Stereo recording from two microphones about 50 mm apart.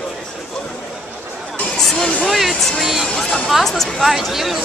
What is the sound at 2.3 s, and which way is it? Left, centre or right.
Speech, centre.